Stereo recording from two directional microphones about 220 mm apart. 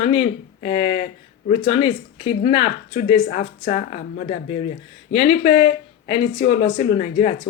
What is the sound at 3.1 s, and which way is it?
Speech, 40° left (ahead or behind).